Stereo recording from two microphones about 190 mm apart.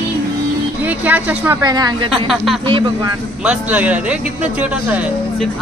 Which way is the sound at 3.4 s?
5° right (ahead or behind).